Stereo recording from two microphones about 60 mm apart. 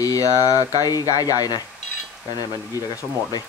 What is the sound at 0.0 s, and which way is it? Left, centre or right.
Speech, left.